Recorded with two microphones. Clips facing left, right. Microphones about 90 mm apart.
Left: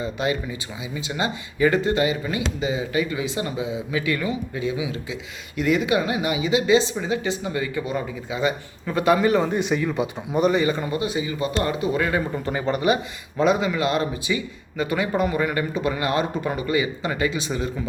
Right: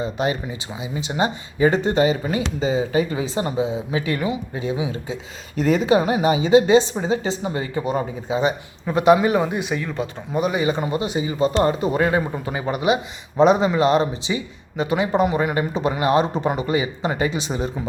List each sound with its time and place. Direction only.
0.0 s a woman's voice: 30° right (ahead or behind); by 10.5 s centre (ahead or behind)
10.5 s speech: 20° right (ahead or behind)
12.3 s a man's voice: 10° right (ahead or behind)
13.4 s speech: 30° right (ahead or behind)